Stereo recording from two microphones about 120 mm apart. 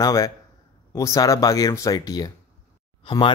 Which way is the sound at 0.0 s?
30° left (ahead or behind).